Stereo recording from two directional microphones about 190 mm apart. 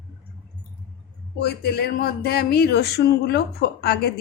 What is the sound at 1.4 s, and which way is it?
Speech, 55° left (ahead or behind).